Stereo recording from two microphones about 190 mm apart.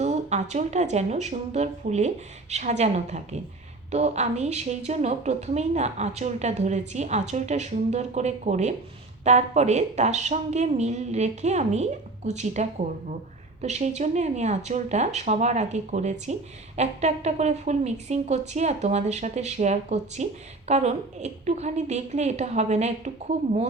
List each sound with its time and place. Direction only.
0.0 s a woman's voice: 35° right (ahead or behind)